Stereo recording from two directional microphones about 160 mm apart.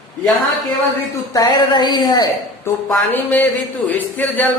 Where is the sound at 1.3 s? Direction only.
25° left (ahead or behind).